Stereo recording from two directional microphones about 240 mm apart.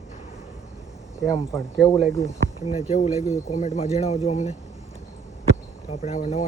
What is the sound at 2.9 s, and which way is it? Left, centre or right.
Speech, left.